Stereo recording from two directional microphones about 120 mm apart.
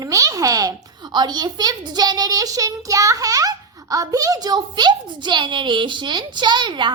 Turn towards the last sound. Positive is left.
turn(degrees=-40)  # may be behind; listen again after turning